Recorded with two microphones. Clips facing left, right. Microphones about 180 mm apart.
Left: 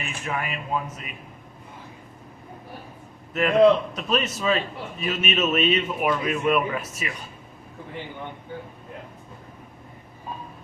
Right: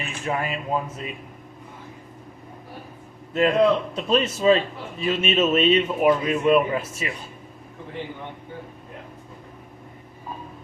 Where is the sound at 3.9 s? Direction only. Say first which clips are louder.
Right 4 dB; 30° right (ahead or behind).